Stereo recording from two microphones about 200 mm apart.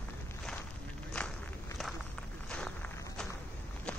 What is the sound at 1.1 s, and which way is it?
Walk, 5° left (ahead or behind).